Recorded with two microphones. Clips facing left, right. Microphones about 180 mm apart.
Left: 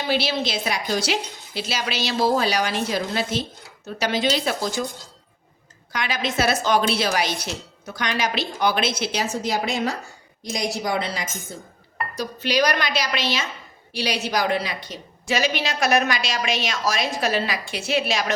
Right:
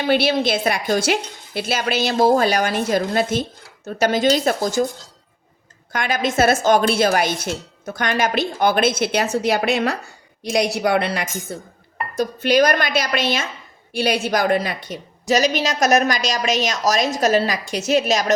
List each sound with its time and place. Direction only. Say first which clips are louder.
0.0 s speech: right 6 dB; 55° right (ahead or behind)
5.9 s speech: right 5 dB; 50° right (ahead or behind); by 11.6 s 65° right (ahead or behind)
12.1 s a woman's voice: right 7 dB; 50° right (ahead or behind)